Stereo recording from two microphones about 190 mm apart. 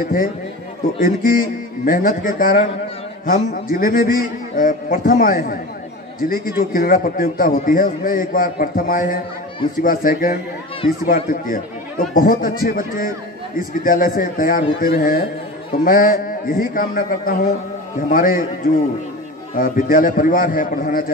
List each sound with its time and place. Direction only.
0.0 s a man's voice: 45° left (ahead or behind)
19.5 s a man's voice: 45° left (ahead or behind)